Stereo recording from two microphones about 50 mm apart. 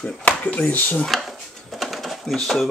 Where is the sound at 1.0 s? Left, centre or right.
Centre.